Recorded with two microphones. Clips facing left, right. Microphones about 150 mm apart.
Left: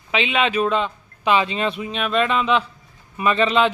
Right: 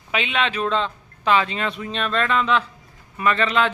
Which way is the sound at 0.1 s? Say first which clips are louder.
Left 3 dB; centre (ahead or behind).